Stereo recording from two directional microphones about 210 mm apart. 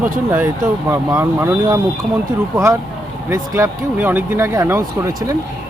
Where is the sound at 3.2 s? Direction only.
15° right (ahead or behind).